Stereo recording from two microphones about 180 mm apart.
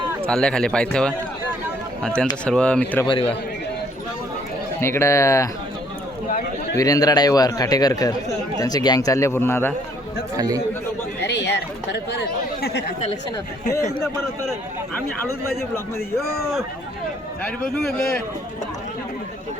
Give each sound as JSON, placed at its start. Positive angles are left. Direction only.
{"t": 0.3, "sound": "speech", "side_deg": 5}
{"t": 3.1, "sound": "a man's voice", "side_deg": 30}
{"t": 4.8, "sound": "speech", "side_deg": 15}
{"t": 6.7, "sound": "a man's voice", "side_deg": 20}
{"t": 10.3, "sound": "speech", "side_deg": -20}
{"t": 11.2, "sound": "a sound", "side_deg": 70}
{"t": 16.1, "sound": "speech", "side_deg": 0}